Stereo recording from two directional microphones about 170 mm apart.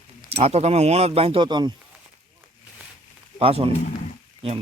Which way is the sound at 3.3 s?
35° right (ahead or behind).